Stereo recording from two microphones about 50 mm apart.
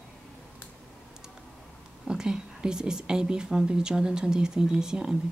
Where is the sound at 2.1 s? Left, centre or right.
Centre.